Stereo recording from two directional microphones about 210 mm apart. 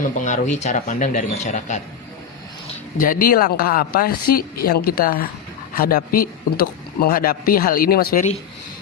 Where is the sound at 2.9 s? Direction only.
40° left (ahead or behind).